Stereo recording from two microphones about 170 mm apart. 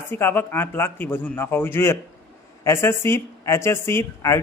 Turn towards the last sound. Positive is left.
turn(degrees=15)  # may be behind; listen again after turning